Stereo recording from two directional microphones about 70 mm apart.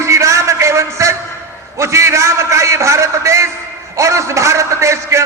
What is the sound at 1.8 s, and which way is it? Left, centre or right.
A man's voice, right.